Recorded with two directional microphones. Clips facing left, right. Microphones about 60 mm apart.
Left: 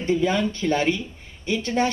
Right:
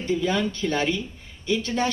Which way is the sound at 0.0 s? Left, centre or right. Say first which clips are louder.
Left 2 dB; left.